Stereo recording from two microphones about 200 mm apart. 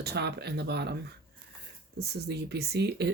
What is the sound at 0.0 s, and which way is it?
Speech, 55° right (ahead or behind).